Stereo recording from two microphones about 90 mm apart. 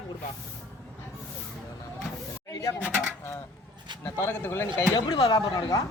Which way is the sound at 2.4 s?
40° left (ahead or behind).